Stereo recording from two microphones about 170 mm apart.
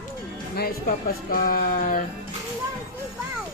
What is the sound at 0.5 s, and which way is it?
Speech, 60° left (ahead or behind).